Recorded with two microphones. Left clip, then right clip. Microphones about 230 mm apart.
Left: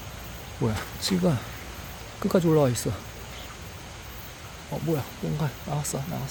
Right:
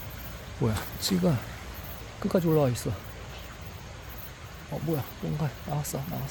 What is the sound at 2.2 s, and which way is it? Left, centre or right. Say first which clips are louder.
Speech: left 3 dB; left.